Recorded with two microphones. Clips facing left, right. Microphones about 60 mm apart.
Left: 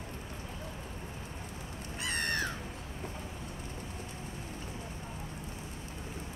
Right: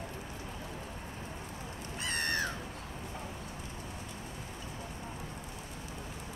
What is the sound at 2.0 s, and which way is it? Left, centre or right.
Crow, centre.